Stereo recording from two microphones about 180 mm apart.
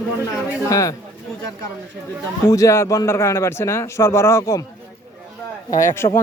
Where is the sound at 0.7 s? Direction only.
15° left (ahead or behind).